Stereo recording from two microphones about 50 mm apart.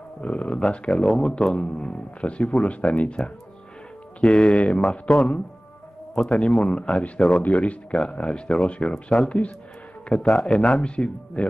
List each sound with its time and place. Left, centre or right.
0.2 s a man's voice: left
1.0 s a man's voice: centre
4.2 s a man's voice: centre
4.8 s speech: centre
7.2 s speech: centre
7.4 s a man's voice: left
7.9 s a man's voice: centre
8.9 s a man's voice: centre